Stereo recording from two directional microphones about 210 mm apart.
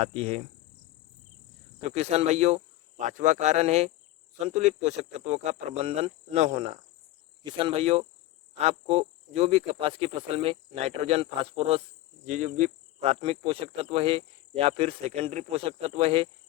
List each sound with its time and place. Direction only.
0.0 s speech: 30° right (ahead or behind)
1.8 s speech: 30° right (ahead or behind)